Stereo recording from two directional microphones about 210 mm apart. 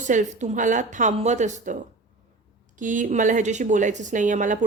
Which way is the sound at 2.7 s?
40° right (ahead or behind).